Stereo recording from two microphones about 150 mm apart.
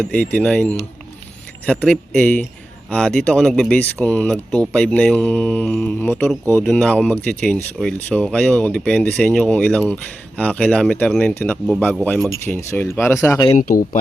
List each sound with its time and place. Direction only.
0.1 s speech: 10° left (ahead or behind)
13.6 s a man's voice: 65° left (ahead or behind)